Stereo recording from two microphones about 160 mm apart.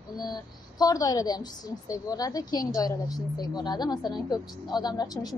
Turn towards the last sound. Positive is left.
turn(degrees=25)  # may be behind; listen again after turning